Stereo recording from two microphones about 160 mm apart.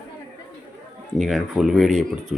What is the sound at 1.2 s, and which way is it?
Speech, centre (ahead or behind).